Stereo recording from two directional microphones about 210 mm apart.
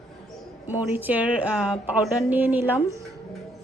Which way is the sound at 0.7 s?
10° right (ahead or behind).